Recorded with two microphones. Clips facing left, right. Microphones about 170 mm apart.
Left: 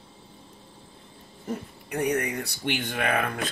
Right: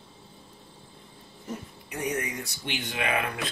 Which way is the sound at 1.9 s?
60° left (ahead or behind).